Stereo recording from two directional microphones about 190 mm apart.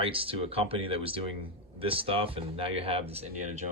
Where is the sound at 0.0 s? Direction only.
30° right (ahead or behind).